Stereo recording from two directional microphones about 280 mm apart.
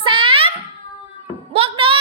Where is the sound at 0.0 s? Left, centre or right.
Centre.